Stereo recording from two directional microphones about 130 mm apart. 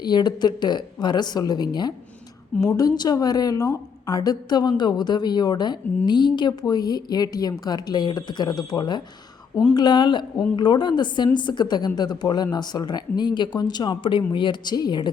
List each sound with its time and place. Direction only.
0.0 s a woman's voice: 35° left (ahead or behind)